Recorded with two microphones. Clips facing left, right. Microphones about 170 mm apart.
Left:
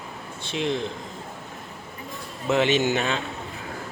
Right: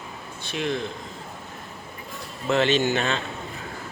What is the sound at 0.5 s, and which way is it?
Speech, 20° left (ahead or behind).